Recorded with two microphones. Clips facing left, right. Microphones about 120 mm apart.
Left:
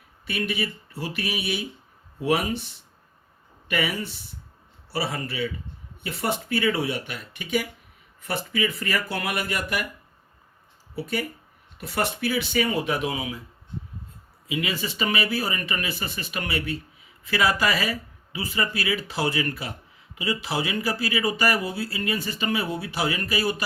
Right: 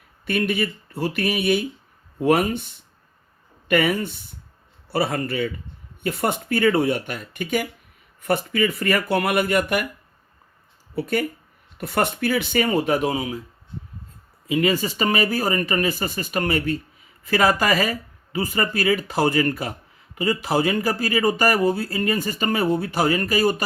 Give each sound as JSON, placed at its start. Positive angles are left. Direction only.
{"t": 0.3, "sound": "speech", "side_deg": -50}
{"t": 3.7, "sound": "speech", "side_deg": -55}
{"t": 10.9, "sound": "speech", "side_deg": -55}
{"t": 14.4, "sound": "speech", "side_deg": -45}